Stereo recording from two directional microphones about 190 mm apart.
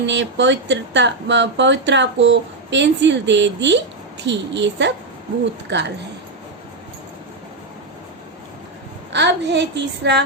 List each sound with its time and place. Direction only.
0.0 s a woman's voice: 70° right (ahead or behind)
9.1 s a woman's voice: 65° right (ahead or behind)